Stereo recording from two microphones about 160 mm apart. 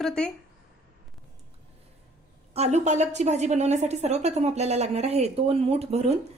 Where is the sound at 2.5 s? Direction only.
45° right (ahead or behind).